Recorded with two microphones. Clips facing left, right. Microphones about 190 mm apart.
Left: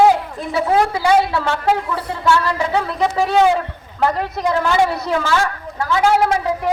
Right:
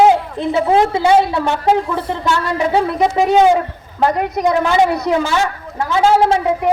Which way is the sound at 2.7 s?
20° right (ahead or behind).